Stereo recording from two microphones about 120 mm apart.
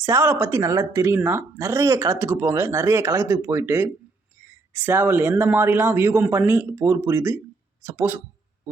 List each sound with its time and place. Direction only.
0.0 s speech: 20° right (ahead or behind)